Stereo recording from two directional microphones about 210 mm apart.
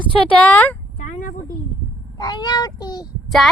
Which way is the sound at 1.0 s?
40° left (ahead or behind).